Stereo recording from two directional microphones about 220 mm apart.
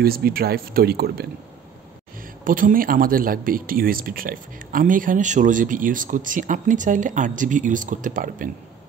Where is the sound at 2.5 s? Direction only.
40° right (ahead or behind).